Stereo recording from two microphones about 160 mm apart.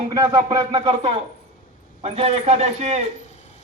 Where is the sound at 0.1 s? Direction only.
20° right (ahead or behind).